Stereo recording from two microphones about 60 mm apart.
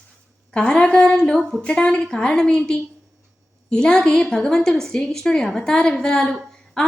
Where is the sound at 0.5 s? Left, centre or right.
Centre.